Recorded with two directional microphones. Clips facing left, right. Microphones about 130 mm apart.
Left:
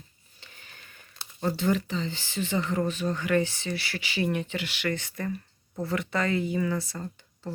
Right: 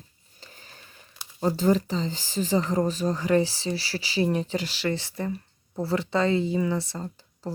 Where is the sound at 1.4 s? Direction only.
35° right (ahead or behind).